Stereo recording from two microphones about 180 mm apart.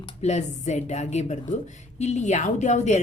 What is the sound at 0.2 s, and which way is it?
A woman's voice, 40° left (ahead or behind).